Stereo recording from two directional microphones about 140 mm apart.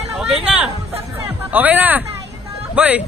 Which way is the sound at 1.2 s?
10° right (ahead or behind).